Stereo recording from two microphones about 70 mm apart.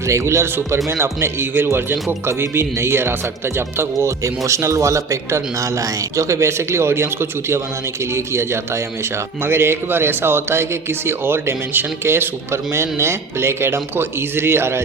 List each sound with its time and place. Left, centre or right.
0.1 s a man's voice: right